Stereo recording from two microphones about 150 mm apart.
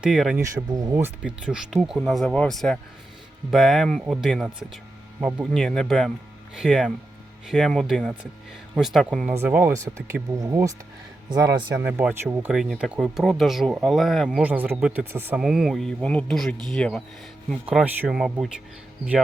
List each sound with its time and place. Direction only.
0.0 s speech: 5° right (ahead or behind)
0.7 s speech: 25° right (ahead or behind)
0.9 s speech: 10° right (ahead or behind)
11.8 s speech: 10° right (ahead or behind)